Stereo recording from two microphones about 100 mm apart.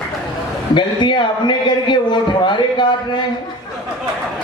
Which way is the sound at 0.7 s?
50° left (ahead or behind).